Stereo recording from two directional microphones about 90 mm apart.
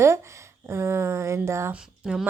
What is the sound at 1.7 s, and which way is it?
Speech, 10° right (ahead or behind).